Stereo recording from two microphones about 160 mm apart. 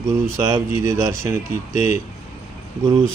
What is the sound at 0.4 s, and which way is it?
Speech, 20° right (ahead or behind).